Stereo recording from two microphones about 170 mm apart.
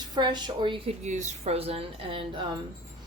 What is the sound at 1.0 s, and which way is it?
A woman's voice, 40° right (ahead or behind).